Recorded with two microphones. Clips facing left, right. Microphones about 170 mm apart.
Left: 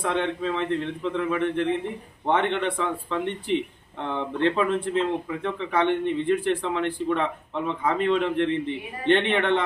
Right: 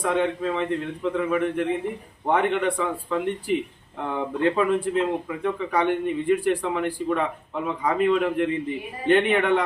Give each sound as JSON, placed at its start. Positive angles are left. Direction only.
{"t": 0.0, "sound": "a man's voice", "side_deg": -5}